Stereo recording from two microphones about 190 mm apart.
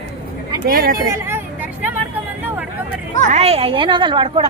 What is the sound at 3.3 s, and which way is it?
A woman's voice, 35° right (ahead or behind).